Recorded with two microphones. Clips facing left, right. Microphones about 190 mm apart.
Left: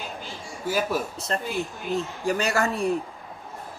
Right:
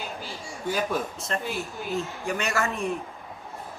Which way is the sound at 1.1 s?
35° left (ahead or behind).